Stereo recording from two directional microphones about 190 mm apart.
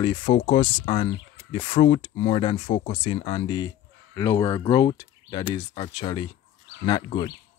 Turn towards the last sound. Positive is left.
turn(degrees=25)  # may be behind; listen again after turning